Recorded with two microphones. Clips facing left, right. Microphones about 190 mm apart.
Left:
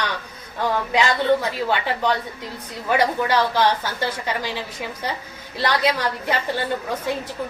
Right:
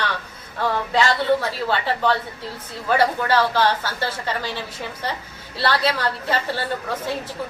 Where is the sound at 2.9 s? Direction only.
15° left (ahead or behind).